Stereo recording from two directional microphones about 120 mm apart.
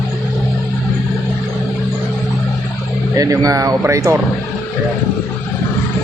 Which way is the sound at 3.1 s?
30° right (ahead or behind).